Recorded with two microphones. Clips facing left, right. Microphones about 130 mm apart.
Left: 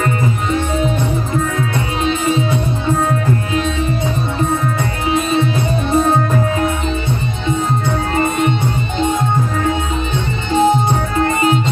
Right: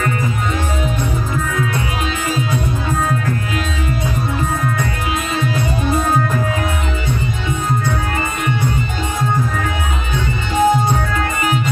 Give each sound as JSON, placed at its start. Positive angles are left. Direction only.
{"t": 4.7, "sound": "music", "side_deg": 25}
{"t": 10.1, "sound": "music", "side_deg": 25}